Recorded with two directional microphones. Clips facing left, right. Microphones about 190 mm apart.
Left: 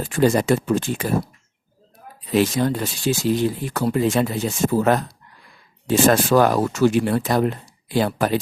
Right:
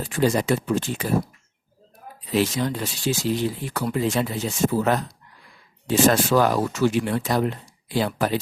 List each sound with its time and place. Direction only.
0.0 s speech: 50° left (ahead or behind)
2.3 s speech: 50° left (ahead or behind)